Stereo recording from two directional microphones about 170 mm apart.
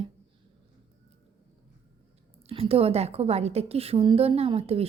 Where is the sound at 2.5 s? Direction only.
35° right (ahead or behind).